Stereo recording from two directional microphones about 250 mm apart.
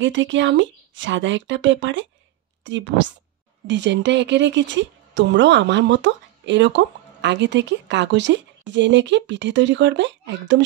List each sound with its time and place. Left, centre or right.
0.0 s speech: right